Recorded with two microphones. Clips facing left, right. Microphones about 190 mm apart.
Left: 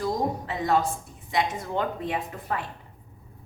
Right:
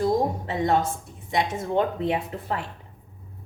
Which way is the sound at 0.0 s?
25° right (ahead or behind).